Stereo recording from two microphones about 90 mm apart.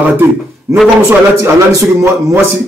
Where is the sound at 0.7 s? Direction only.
35° right (ahead or behind).